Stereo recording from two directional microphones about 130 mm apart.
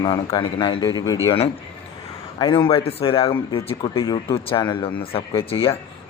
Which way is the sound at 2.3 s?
40° left (ahead or behind).